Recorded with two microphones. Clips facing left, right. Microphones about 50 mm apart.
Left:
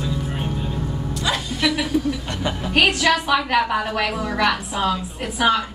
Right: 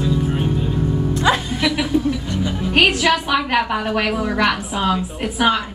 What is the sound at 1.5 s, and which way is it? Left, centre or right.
A woman's voice, centre.